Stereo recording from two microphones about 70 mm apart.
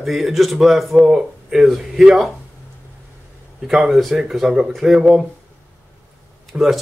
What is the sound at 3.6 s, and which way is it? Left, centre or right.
Speech, centre.